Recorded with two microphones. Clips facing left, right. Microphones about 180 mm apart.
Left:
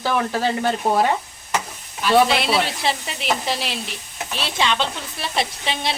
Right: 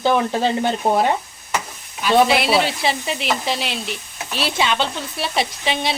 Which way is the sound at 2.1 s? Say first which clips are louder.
Right 1 dB; 5° right (ahead or behind).